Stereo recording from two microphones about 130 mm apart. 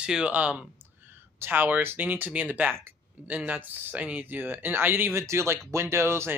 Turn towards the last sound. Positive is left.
turn(degrees=-20)  # may be behind; listen again after turning